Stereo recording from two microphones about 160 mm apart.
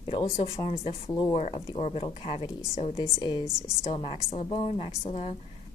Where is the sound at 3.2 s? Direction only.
30° left (ahead or behind).